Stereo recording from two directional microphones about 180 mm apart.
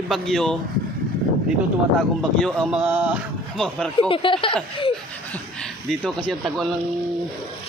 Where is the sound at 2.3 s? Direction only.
5° left (ahead or behind).